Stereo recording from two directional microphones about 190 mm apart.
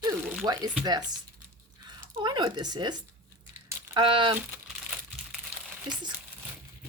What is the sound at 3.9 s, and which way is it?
Speech, 25° right (ahead or behind).